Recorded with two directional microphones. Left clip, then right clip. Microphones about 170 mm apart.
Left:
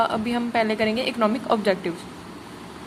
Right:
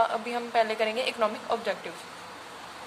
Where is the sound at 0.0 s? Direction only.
20° left (ahead or behind).